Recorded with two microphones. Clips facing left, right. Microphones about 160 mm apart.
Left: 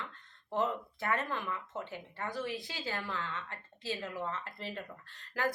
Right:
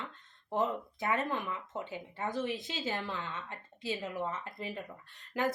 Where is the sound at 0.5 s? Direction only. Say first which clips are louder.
Right 1 dB; 15° right (ahead or behind).